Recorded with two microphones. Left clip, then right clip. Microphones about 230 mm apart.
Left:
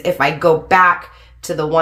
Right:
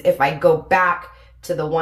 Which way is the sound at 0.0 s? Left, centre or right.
Left.